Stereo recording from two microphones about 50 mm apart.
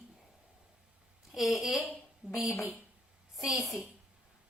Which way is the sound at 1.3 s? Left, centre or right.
Centre.